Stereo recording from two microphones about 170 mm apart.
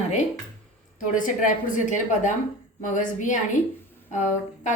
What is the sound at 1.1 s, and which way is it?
A woman's voice, 50° left (ahead or behind).